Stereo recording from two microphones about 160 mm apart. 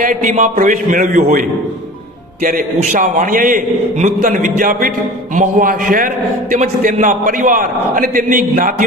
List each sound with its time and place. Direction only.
0.0 s a man's voice: 55° right (ahead or behind)